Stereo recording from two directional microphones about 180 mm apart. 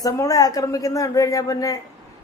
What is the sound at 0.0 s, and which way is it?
A woman's voice, 20° left (ahead or behind).